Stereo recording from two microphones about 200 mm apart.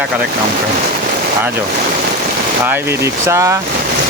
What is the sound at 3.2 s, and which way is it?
Speech, 15° right (ahead or behind).